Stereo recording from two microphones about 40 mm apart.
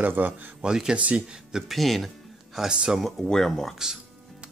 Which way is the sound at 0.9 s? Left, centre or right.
Right.